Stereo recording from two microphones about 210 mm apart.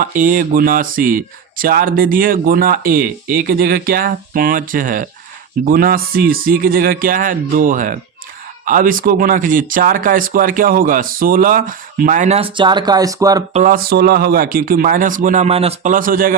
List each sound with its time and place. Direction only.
0.0 s speech: 40° right (ahead or behind); by 13.4 s 15° right (ahead or behind)
13.5 s speech: 40° right (ahead or behind)